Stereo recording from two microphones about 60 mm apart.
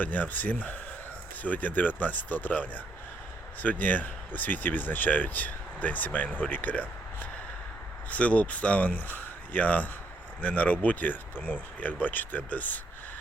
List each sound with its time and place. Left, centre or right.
0.0 s speech: left